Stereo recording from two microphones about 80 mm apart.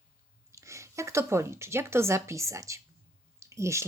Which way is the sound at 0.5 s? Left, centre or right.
Right.